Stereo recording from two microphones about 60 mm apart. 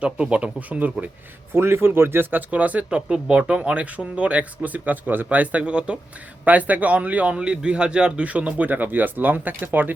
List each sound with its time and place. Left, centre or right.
0.0 s speech: centre
1.5 s speech: right
2.3 s speech: right